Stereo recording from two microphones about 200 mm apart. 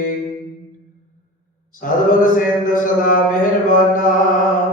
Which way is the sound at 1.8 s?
40° left (ahead or behind).